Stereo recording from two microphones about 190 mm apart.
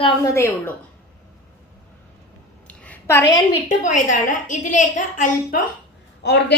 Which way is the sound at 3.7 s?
45° left (ahead or behind).